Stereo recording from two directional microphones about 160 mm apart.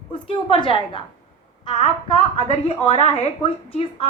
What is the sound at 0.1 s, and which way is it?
A woman's voice, 30° left (ahead or behind).